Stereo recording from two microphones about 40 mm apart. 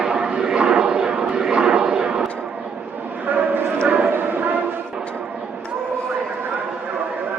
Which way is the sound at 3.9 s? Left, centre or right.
Right.